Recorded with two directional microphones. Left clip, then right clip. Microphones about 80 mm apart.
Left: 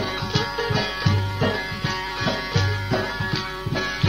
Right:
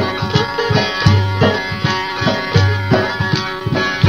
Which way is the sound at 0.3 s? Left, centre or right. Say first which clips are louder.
Right 7 dB; left.